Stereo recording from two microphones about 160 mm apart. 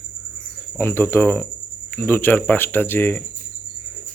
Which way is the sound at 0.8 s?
15° left (ahead or behind).